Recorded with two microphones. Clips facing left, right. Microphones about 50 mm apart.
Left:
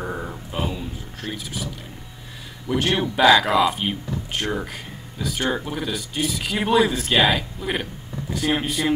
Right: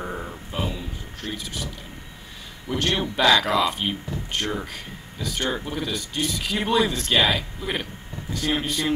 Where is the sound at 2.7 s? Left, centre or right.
Centre.